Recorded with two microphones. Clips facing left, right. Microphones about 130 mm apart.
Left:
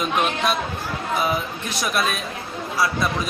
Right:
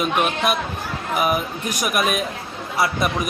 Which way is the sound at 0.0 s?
10° right (ahead or behind).